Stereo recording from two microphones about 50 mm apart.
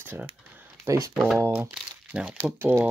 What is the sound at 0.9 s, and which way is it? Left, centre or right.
Speech, right.